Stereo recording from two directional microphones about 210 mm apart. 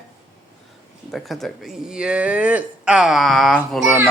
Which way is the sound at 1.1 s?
Centre (ahead or behind).